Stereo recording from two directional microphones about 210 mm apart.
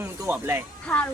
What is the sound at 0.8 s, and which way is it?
Speech, 5° left (ahead or behind).